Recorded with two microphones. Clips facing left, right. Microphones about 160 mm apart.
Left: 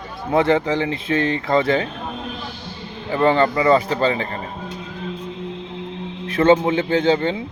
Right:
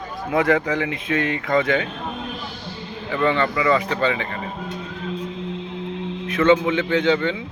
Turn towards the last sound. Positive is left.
turn(degrees=35)  # may be behind; listen again after turning